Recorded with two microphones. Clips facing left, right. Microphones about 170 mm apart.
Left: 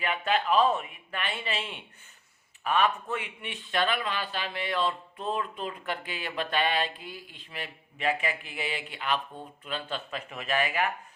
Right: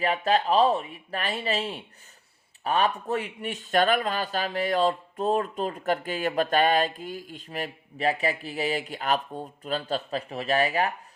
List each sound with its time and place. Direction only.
0.0 s speech: 35° right (ahead or behind)